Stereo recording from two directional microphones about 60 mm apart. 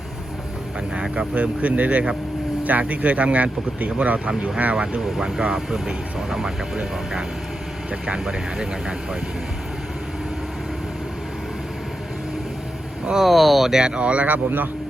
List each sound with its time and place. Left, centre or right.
1.1 s speech: right
13.1 s speech: centre; by 14.7 s right